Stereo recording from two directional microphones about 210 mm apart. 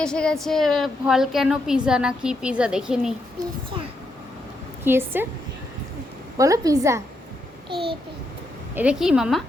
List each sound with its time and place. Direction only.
0.0 s a woman's voice: 5° left (ahead or behind)
4.8 s a woman's voice: 10° right (ahead or behind)
6.3 s a woman's voice: 15° right (ahead or behind)
8.7 s a woman's voice: 5° right (ahead or behind)